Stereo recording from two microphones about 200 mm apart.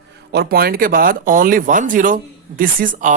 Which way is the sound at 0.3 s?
55° right (ahead or behind).